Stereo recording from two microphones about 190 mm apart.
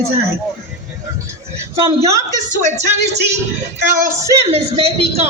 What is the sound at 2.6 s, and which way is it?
Speech, 40° right (ahead or behind).